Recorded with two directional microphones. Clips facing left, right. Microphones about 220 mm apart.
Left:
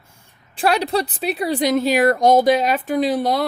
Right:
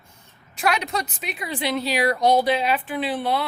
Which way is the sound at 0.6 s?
35° left (ahead or behind).